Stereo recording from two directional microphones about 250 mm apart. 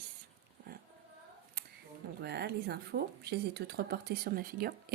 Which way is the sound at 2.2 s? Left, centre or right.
Right.